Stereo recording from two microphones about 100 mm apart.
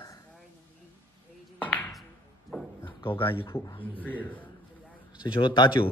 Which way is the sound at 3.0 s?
60° left (ahead or behind).